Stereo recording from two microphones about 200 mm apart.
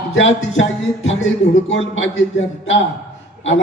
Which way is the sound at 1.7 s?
70° left (ahead or behind).